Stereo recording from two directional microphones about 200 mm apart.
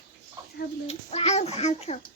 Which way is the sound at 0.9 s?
35° left (ahead or behind).